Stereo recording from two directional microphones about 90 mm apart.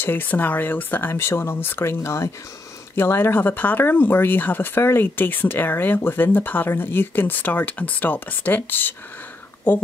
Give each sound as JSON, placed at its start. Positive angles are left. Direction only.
{"t": 0.0, "sound": "speech", "side_deg": 20}